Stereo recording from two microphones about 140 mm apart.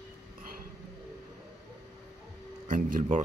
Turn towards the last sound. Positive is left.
turn(degrees=-70)  # may be behind; listen again after turning